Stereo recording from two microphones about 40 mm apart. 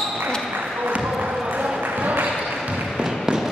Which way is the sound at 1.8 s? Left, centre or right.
Right.